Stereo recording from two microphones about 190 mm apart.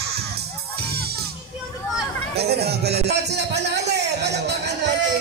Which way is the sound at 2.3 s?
60° right (ahead or behind).